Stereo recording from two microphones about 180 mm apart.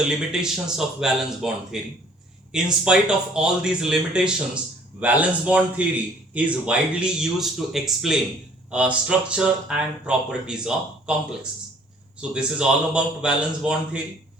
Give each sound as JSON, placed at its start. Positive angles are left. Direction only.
{"t": 0.3, "sound": "speech", "side_deg": -5}
{"t": 12.3, "sound": "speech", "side_deg": -5}